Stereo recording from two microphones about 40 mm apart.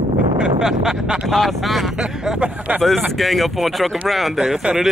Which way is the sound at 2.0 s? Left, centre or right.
Centre.